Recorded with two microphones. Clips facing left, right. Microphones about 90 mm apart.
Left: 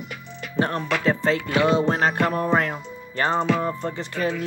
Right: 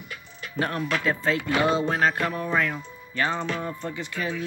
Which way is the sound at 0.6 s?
30° left (ahead or behind).